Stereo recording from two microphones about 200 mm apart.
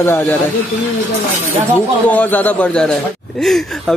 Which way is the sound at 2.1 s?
10° left (ahead or behind).